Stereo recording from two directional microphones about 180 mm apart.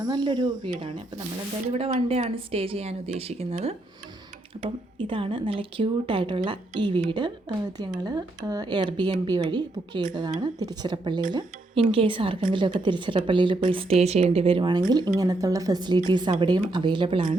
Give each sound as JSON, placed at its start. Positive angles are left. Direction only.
{"t": 0.0, "sound": "speech", "side_deg": -25}